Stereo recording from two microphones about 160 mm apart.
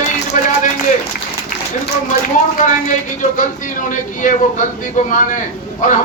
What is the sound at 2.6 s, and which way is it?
A man's voice, 50° left (ahead or behind).